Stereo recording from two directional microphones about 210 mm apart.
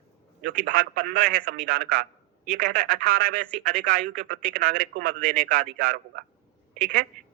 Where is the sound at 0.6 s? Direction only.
40° right (ahead or behind).